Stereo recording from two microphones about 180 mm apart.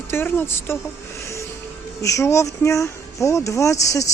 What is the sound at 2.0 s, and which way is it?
Speech, 15° left (ahead or behind).